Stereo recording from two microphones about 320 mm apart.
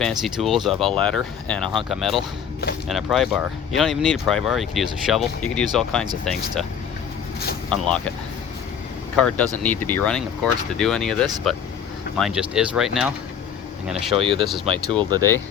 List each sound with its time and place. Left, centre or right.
0.0 s speech: centre
9.1 s speech: centre
14.2 s speech: centre